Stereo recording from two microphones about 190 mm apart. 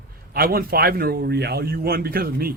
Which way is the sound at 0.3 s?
50° right (ahead or behind).